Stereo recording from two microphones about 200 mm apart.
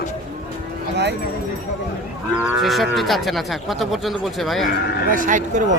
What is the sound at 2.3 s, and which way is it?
Cattle, 5° right (ahead or behind).